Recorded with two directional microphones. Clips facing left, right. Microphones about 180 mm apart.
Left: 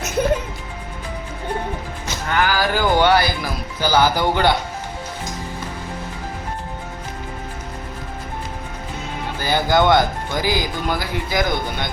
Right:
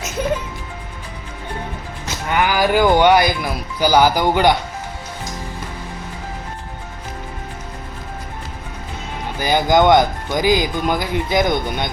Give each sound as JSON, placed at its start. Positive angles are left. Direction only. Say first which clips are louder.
{"t": 2.3, "sound": "a sound", "louder": "right 3 dB", "side_deg": -15}
{"t": 3.8, "sound": "speech", "louder": "right 3 dB", "side_deg": -15}
{"t": 9.4, "sound": "speech", "louder": "right 3 dB", "side_deg": -15}